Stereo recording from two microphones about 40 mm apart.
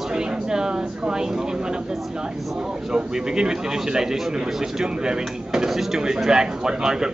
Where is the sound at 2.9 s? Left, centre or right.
Centre.